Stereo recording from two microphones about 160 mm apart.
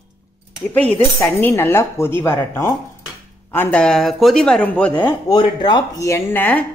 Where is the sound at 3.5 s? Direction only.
10° left (ahead or behind).